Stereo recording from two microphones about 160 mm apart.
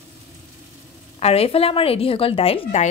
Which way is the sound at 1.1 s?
40° left (ahead or behind).